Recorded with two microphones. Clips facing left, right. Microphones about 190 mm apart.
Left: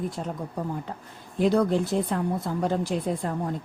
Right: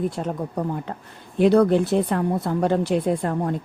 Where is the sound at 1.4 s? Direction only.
70° right (ahead or behind).